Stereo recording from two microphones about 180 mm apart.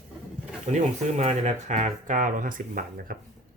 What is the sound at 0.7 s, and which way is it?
Speech, 35° right (ahead or behind).